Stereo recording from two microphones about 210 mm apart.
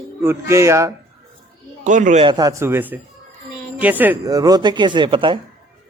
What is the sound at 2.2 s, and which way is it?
Speech, 20° right (ahead or behind).